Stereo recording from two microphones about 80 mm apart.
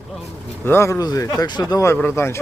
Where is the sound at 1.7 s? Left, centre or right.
Left.